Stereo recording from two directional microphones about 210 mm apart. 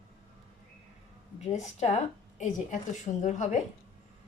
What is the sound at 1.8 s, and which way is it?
A woman's voice, 35° left (ahead or behind).